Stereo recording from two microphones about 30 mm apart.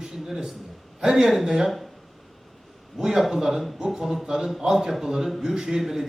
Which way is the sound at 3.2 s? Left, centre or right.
Centre.